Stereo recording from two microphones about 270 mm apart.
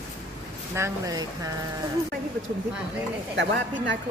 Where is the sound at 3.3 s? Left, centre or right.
Right.